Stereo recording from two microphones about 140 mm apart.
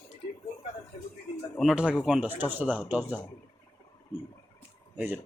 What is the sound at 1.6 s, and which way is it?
Speech, 5° right (ahead or behind).